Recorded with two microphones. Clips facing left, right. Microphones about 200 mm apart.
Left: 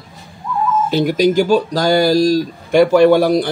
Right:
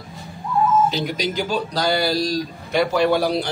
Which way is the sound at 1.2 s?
45° left (ahead or behind).